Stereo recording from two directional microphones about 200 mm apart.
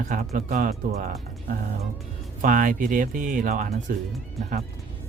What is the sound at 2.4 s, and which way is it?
Speech, 40° right (ahead or behind).